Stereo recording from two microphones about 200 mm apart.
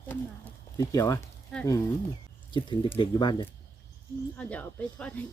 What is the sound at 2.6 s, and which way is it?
Speech, 25° left (ahead or behind).